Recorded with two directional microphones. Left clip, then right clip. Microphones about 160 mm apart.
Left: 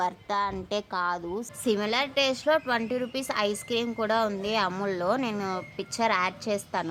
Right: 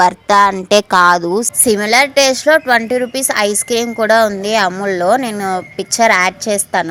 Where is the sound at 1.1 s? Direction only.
35° right (ahead or behind).